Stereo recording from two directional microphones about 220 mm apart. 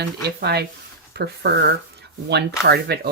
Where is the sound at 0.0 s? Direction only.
50° right (ahead or behind).